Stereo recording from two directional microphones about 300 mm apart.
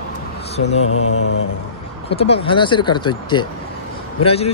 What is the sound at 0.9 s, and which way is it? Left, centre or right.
Mantra, left.